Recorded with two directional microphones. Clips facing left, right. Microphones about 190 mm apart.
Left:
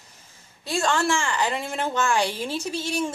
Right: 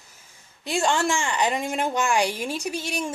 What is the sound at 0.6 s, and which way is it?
A woman's voice, 15° right (ahead or behind).